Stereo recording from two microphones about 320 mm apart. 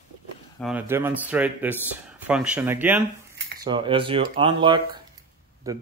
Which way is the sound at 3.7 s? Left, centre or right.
Centre.